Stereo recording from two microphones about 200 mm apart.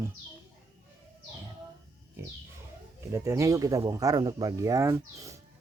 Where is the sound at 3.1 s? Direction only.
15° right (ahead or behind).